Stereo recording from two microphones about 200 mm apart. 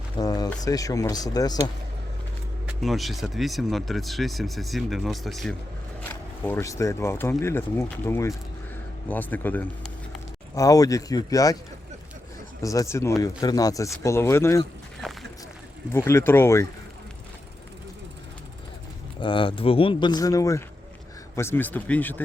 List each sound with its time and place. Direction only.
0.2 s speech: 20° left (ahead or behind)
2.6 s speech: centre (ahead or behind); by 11.5 s 15° left (ahead or behind)
12.6 s speech: 15° left (ahead or behind)
15.0 s a sound: 5° left (ahead or behind)
15.9 s speech: 10° left (ahead or behind)
19.2 s speech: 25° left (ahead or behind); by 22.2 s 10° left (ahead or behind)